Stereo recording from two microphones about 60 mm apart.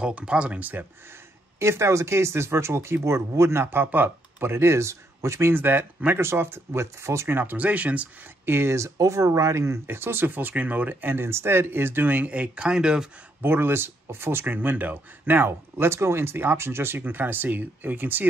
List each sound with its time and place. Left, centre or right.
0.0 s speech: centre
1.6 s speech: right
6.1 s speech: right
7.2 s speech: right
8.5 s speech: right; by 13.1 s centre
13.4 s speech: right